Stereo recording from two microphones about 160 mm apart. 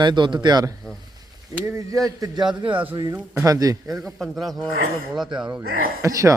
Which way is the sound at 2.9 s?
30° right (ahead or behind).